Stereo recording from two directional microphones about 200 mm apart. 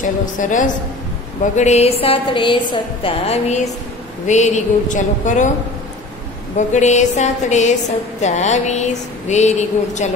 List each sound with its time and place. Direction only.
0.0 s a woman's voice: 40° left (ahead or behind)
6.5 s speech: 35° left (ahead or behind)